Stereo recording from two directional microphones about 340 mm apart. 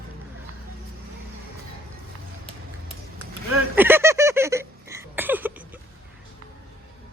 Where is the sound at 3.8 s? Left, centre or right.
Centre.